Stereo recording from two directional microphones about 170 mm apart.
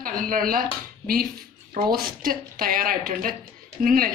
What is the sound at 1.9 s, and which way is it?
A woman's voice, 60° right (ahead or behind).